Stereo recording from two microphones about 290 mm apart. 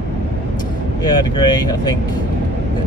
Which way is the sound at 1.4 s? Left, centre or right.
Centre.